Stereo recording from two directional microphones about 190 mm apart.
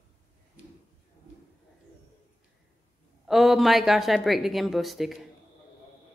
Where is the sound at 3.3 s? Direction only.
Centre (ahead or behind).